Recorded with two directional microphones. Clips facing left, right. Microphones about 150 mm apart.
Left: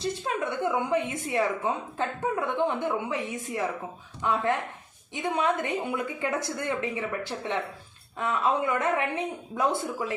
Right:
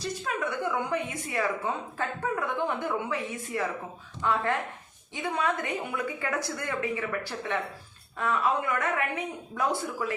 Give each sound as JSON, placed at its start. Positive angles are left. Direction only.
{"t": 0.0, "sound": "a woman's voice", "side_deg": 20}